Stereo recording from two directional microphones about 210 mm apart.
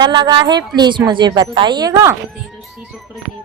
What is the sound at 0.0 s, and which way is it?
A woman's voice, 20° right (ahead or behind).